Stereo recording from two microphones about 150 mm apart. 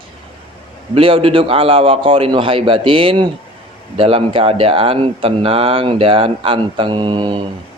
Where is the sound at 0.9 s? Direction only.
35° right (ahead or behind).